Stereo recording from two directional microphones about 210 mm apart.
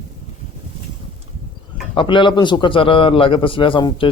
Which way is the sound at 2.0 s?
25° left (ahead or behind).